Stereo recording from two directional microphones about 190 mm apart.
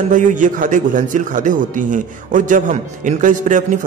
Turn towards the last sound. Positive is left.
turn(degrees=-40)  # may be behind; listen again after turning